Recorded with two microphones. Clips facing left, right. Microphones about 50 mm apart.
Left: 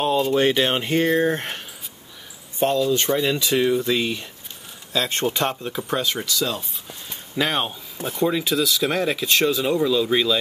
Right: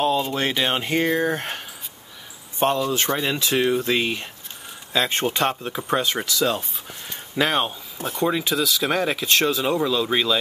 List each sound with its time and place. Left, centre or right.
0.2 s speech: centre
2.6 s speech: right
4.9 s speech: centre
7.3 s speech: centre